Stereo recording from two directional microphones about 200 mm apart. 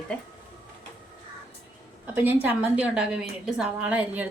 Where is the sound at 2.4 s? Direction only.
5° right (ahead or behind).